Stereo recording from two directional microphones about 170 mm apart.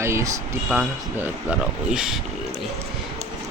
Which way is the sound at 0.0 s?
15° right (ahead or behind).